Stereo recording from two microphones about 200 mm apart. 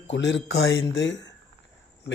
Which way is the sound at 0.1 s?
60° left (ahead or behind).